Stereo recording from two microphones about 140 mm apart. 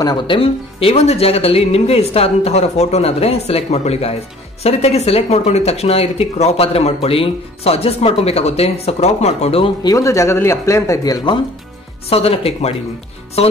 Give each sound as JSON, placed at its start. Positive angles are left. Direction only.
{"t": 0.0, "sound": "speech", "side_deg": 35}
{"t": 9.8, "sound": "speech", "side_deg": 20}
{"t": 12.1, "sound": "speech", "side_deg": 45}